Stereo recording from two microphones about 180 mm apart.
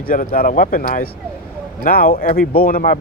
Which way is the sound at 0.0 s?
50° left (ahead or behind).